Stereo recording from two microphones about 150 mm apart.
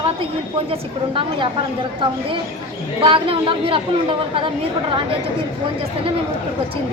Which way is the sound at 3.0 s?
35° right (ahead or behind).